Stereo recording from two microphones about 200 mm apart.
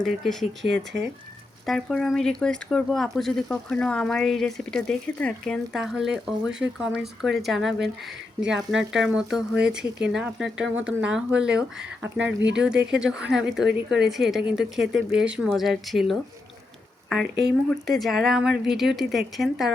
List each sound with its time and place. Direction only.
0.6 s speech: 65° right (ahead or behind)
1.6 s speech: centre (ahead or behind)
17.7 s speech: centre (ahead or behind)